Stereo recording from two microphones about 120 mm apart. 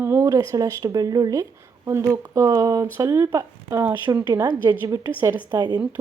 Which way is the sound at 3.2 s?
30° right (ahead or behind).